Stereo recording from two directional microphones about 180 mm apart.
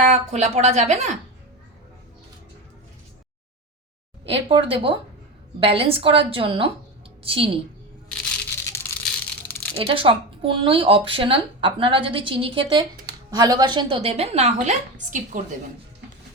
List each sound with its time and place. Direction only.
0.0 s speech: 40° right (ahead or behind)
4.3 s speech: 30° right (ahead or behind)
9.7 s speech: 30° right (ahead or behind); by 15.5 s 50° right (ahead or behind)